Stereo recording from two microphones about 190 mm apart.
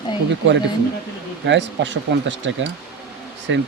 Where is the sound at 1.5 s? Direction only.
70° right (ahead or behind).